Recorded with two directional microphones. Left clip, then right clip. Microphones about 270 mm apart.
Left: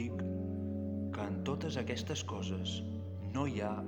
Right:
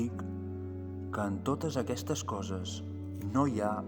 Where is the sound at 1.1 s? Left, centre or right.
Right.